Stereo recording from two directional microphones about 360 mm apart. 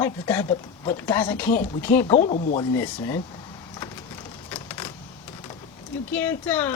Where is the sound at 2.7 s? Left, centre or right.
Centre.